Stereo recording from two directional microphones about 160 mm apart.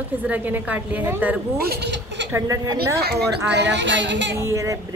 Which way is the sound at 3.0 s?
85° right.